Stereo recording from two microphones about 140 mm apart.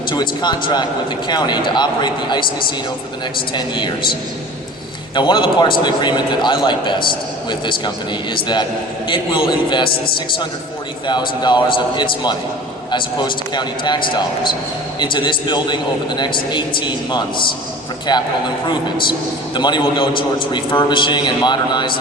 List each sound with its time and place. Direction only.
0.1 s a man's voice: 35° left (ahead or behind)
5.1 s a man's voice: 35° left (ahead or behind)
11.0 s a man's voice: 35° left (ahead or behind)